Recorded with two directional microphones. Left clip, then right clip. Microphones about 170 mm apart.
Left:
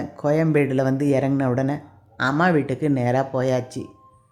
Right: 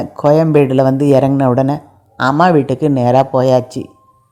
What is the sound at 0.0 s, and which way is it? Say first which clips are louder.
Speech: right 10 dB; 30° right (ahead or behind).